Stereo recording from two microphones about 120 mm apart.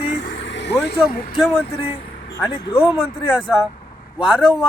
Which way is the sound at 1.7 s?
55° left (ahead or behind).